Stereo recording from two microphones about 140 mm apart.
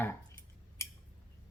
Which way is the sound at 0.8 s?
20° left (ahead or behind).